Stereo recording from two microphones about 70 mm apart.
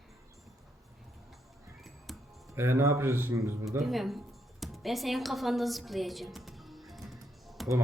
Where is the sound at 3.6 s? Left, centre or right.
Centre.